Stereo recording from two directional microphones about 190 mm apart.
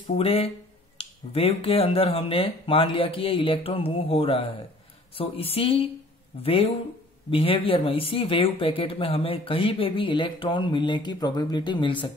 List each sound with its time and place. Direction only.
0.0 s speech: 30° left (ahead or behind)